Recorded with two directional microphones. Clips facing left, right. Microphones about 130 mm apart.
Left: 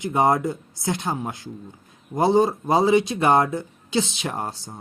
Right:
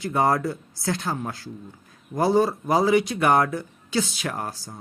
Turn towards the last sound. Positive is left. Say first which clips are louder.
# left 1 dB
turn(degrees=25)  # may be behind; listen again after turning